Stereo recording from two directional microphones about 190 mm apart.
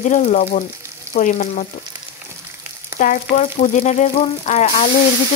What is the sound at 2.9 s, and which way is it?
Frying, 45° left (ahead or behind).